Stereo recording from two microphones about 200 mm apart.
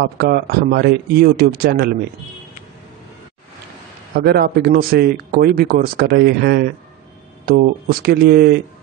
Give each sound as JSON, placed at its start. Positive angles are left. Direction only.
{"t": 0.0, "sound": "speech", "side_deg": -55}
{"t": 4.2, "sound": "speech", "side_deg": -55}